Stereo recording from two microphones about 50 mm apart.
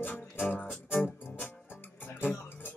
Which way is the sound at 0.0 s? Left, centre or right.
Left.